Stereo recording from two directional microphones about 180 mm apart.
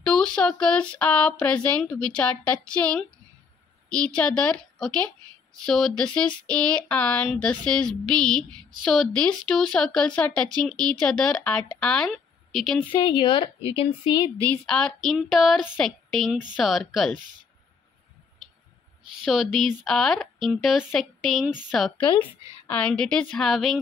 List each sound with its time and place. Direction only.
0.0 s a woman's voice: 5° left (ahead or behind)
12.8 s speech: 25° left (ahead or behind)
14.7 s speech: 5° left (ahead or behind)
19.2 s speech: centre (ahead or behind)